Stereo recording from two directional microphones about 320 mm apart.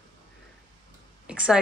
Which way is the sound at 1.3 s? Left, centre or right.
Centre.